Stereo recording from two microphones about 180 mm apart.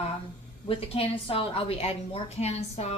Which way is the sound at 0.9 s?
30° left (ahead or behind).